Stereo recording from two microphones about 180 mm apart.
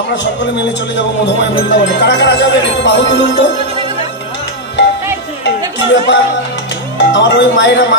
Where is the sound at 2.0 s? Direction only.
80° left.